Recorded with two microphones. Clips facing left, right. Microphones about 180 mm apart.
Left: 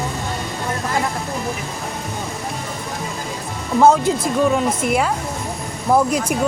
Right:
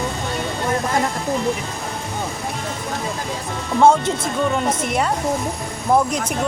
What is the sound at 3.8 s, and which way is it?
Speech, 5° left (ahead or behind).